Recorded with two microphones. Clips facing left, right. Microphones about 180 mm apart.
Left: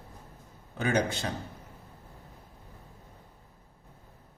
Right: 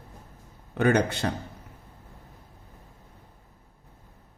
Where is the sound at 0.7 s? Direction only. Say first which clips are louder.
Right 5 dB; 60° right (ahead or behind).